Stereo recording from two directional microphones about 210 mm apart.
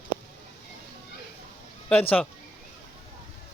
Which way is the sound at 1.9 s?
5° left (ahead or behind).